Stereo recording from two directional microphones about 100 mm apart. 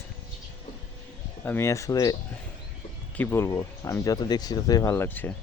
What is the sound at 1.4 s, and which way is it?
Speech, 25° left (ahead or behind).